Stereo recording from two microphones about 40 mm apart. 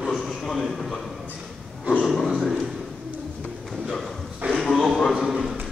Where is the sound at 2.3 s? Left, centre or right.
Centre.